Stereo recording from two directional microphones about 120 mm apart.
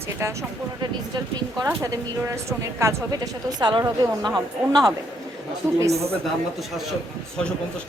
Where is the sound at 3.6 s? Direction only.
40° right (ahead or behind).